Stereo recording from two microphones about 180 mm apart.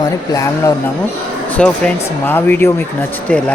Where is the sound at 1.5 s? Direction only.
5° left (ahead or behind).